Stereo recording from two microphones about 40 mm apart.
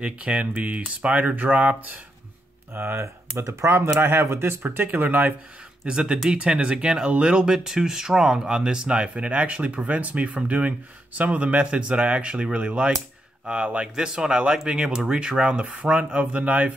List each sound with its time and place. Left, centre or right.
0.0 s speech: right
2.7 s speech: right
3.7 s speech: right
4.6 s speech: right
5.9 s speech: right
11.6 s speech: right